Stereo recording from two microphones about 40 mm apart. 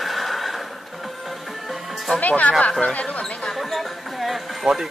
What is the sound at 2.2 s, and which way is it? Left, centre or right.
Speech, left.